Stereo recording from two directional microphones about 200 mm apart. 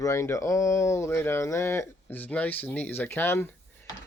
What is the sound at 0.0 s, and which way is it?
Speech, 15° left (ahead or behind).